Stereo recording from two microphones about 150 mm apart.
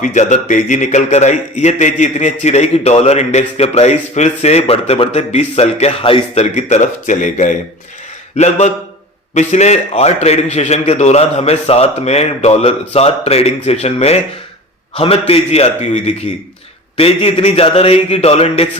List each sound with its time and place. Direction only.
0.0 s a man's voice: 55° left (ahead or behind); by 6.4 s 35° left (ahead or behind)
6.6 s a man's voice: 50° left (ahead or behind)